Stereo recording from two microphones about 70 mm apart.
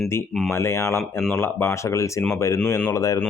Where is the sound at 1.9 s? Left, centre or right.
Left.